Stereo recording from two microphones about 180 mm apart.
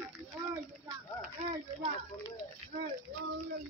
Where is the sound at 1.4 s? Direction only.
40° right (ahead or behind).